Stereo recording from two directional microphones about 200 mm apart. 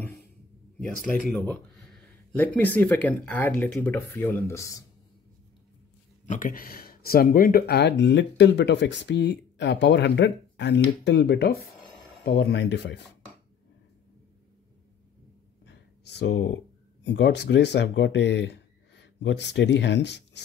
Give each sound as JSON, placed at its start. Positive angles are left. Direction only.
{"t": 1.0, "sound": "speech", "side_deg": 5}
{"t": 6.2, "sound": "speech", "side_deg": 40}
{"t": 15.6, "sound": "speech", "side_deg": 60}